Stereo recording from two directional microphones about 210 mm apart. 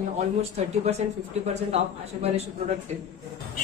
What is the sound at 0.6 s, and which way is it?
Speech, 30° right (ahead or behind).